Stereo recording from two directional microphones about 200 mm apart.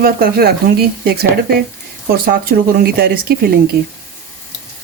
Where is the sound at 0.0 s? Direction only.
50° right (ahead or behind).